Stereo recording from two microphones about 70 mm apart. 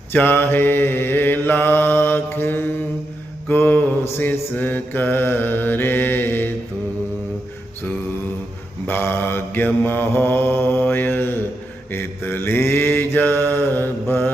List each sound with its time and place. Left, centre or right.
0.1 s mantra: left
8.9 s mantra: left